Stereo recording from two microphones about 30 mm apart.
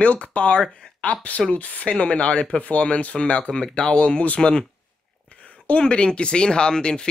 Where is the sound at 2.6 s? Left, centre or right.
Left.